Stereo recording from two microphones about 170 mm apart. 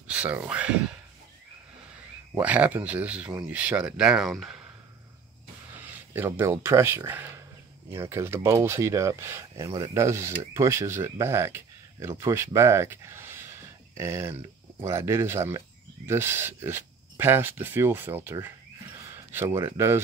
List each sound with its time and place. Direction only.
0.0 s speech: 10° right (ahead or behind)
2.3 s speech: 10° right (ahead or behind)
6.1 s speech: 10° right (ahead or behind)